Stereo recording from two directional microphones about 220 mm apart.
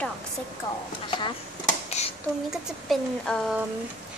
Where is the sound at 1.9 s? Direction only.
30° left (ahead or behind).